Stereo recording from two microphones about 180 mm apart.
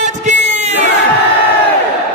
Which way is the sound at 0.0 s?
40° right (ahead or behind).